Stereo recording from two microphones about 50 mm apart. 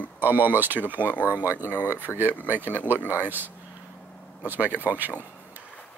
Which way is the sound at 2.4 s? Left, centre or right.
Right.